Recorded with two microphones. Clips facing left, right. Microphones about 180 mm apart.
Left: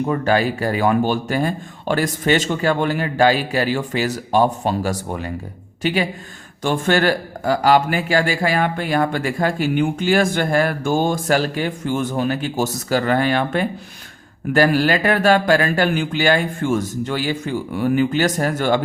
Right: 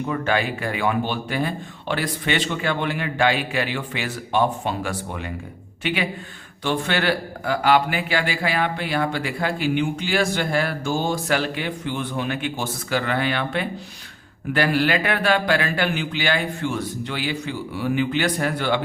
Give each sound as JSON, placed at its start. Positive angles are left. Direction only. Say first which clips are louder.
{"t": 0.0, "sound": "speech", "louder": "left 5 dB", "side_deg": 40}